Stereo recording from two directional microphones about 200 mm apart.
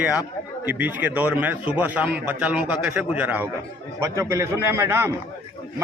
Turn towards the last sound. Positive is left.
turn(degrees=-10)  # may be behind; listen again after turning